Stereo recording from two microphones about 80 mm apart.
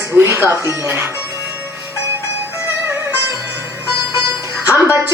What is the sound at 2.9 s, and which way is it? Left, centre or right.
Music, right.